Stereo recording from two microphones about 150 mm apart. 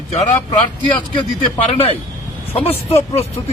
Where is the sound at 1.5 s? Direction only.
45° left (ahead or behind).